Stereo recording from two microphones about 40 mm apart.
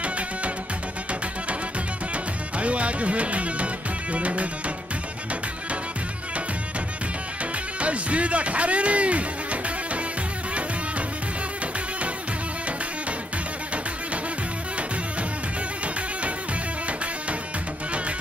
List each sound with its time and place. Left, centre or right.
2.6 s music: right
7.8 s music: right